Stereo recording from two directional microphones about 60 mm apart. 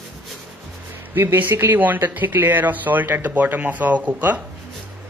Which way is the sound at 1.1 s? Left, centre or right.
Right.